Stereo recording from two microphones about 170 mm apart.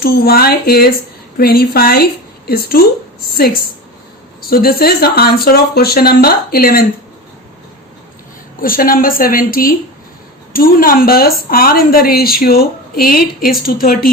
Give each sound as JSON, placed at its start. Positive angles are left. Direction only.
{"t": 0.0, "sound": "a woman's voice", "side_deg": 65}
{"t": 8.6, "sound": "a woman's voice", "side_deg": 60}